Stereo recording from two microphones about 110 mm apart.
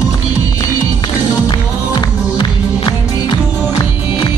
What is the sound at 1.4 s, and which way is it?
Music, 40° left (ahead or behind).